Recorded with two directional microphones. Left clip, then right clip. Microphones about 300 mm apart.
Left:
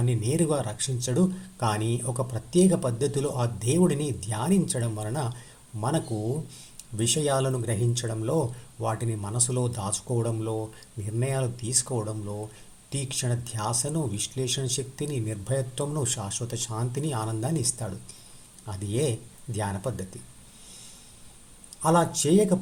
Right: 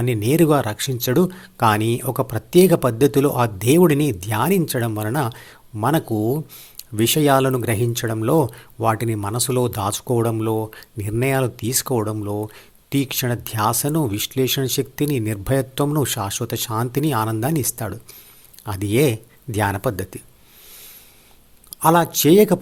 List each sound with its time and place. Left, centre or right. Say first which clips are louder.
0.0 s speech: right 10 dB; right
21.8 s speech: right 7 dB; right